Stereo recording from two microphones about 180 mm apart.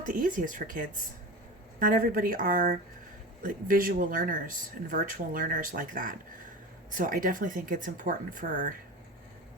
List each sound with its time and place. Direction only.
0.0 s speech: 50° right (ahead or behind)